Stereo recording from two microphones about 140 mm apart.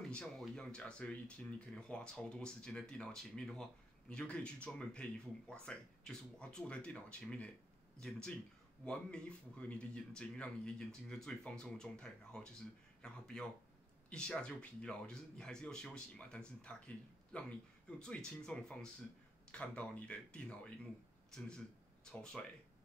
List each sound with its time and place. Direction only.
0.1 s speech: 5° left (ahead or behind)